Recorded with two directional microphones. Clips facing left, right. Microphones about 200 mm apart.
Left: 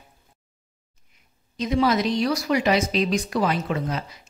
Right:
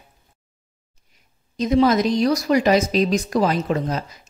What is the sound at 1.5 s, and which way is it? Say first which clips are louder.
Speech: right 5 dB; 40° right (ahead or behind).